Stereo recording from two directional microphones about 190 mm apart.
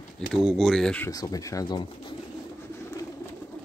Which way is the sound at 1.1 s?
20° left (ahead or behind).